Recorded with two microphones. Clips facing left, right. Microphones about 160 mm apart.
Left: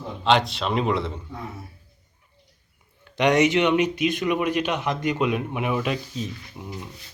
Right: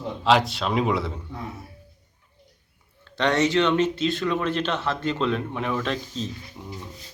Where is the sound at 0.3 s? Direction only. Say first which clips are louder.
Even; centre (ahead or behind).